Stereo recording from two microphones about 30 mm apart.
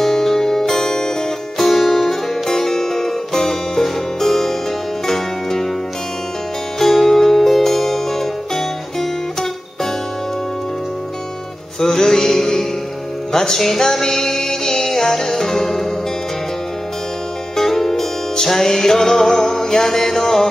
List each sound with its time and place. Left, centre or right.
0.0 s music: centre
1.6 s music: centre
6.8 s music: centre
11.8 s music: centre
17.6 s music: centre